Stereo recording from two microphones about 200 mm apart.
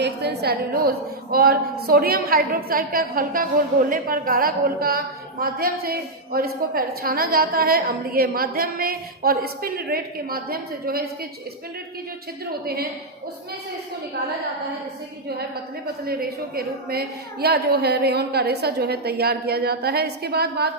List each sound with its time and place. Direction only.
0.0 s a woman's voice: 55° right (ahead or behind)
16.6 s a woman's voice: 50° right (ahead or behind)